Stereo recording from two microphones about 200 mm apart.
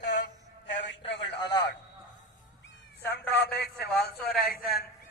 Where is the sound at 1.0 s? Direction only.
65° left (ahead or behind).